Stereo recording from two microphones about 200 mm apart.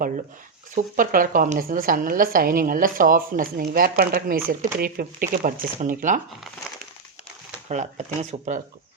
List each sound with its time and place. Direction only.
0.8 s a woman's voice: 45° right (ahead or behind)
7.7 s speech: 35° right (ahead or behind)